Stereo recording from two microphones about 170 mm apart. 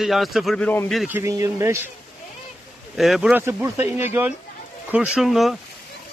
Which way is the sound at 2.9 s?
Centre (ahead or behind).